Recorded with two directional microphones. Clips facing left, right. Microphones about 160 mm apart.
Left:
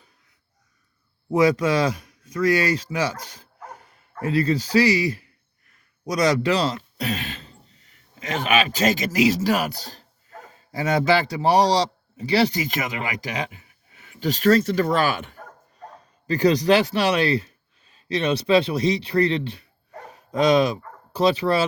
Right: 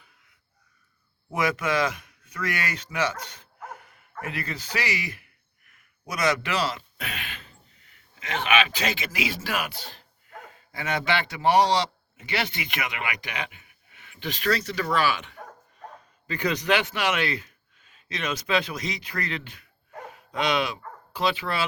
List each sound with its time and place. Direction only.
1.3 s a man's voice: 30° left (ahead or behind)
16.2 s speech: 35° left (ahead or behind)